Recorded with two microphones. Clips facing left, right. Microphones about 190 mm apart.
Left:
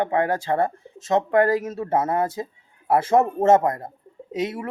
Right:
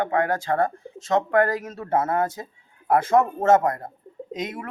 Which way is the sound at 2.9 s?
25° left (ahead or behind).